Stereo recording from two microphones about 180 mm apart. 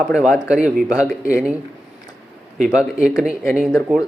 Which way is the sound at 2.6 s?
5° right (ahead or behind).